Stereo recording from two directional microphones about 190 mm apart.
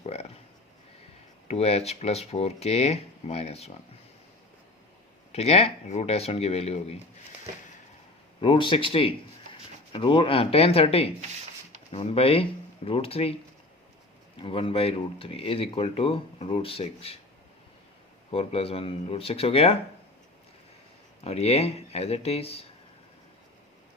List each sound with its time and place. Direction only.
0.0 s a sound: 35° left (ahead or behind)
1.5 s speech: 35° left (ahead or behind)
5.3 s speech: 35° left (ahead or behind)
8.4 s speech: 25° left (ahead or behind)
14.4 s speech: 30° left (ahead or behind)
18.3 s speech: 30° left (ahead or behind)
21.2 s speech: 35° left (ahead or behind)